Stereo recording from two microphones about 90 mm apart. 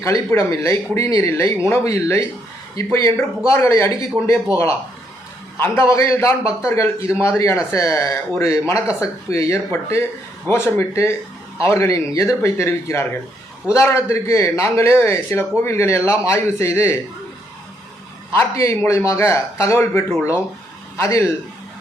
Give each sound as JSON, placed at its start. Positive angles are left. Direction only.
{"t": 0.0, "sound": "a man's voice", "side_deg": 30}
{"t": 5.5, "sound": "a man's voice", "side_deg": 25}
{"t": 18.3, "sound": "a man's voice", "side_deg": 30}